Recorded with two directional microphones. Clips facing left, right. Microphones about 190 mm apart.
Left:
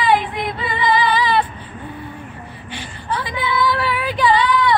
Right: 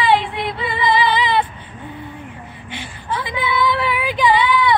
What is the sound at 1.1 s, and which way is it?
Female singing, 20° right (ahead or behind).